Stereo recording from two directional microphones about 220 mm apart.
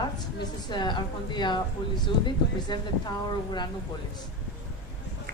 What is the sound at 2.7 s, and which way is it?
Speech, 20° left (ahead or behind).